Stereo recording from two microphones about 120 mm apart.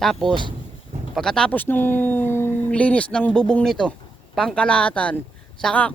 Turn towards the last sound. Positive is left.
turn(degrees=10)  # may be behind; listen again after turning